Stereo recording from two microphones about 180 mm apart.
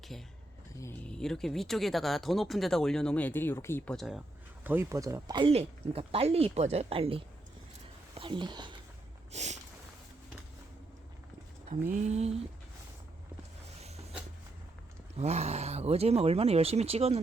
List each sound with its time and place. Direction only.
0.1 s speech: centre (ahead or behind)
3.9 s speech: centre (ahead or behind)
4.6 s speech: 15° right (ahead or behind)
9.3 s speech: 40° right (ahead or behind)
11.7 s speech: 40° right (ahead or behind)
15.2 s speech: 40° right (ahead or behind)